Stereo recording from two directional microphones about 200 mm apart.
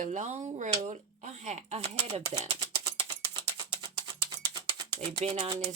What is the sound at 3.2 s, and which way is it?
Typing, 25° right (ahead or behind).